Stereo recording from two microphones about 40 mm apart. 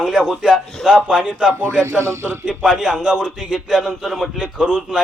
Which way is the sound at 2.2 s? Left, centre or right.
Right.